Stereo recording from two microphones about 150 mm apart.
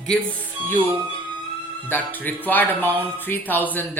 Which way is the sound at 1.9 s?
10° left (ahead or behind).